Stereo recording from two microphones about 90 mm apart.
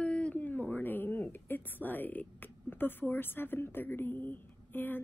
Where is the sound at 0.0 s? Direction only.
10° left (ahead or behind).